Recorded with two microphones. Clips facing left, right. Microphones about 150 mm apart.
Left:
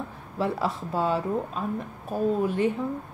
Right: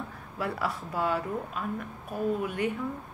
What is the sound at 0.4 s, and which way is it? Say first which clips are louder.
A woman's voice: left 5 dB; 25° left (ahead or behind).